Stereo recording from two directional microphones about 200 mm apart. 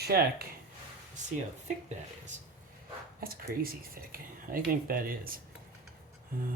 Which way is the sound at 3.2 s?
45° right (ahead or behind).